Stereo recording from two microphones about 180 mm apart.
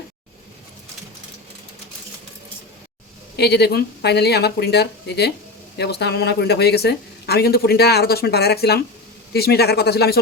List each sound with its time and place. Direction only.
3.3 s speech: 65° left (ahead or behind)